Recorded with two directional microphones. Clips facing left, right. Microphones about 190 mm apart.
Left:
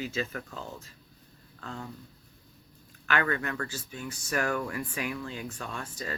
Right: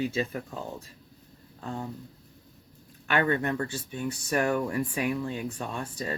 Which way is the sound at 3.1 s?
25° right (ahead or behind).